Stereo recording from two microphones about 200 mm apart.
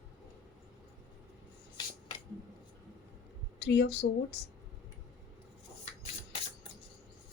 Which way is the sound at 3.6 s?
55° left (ahead or behind).